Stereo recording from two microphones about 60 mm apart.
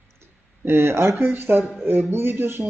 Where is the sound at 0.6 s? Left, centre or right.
Right.